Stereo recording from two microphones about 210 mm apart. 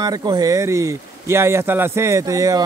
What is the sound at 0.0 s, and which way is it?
Speech, 20° right (ahead or behind).